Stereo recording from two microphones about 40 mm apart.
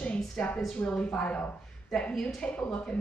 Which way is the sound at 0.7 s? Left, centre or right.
Left.